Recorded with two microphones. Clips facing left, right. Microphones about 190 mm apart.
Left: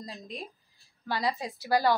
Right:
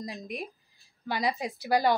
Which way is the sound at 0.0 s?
15° right (ahead or behind).